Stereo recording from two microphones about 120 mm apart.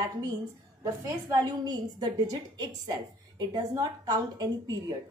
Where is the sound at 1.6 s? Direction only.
35° right (ahead or behind).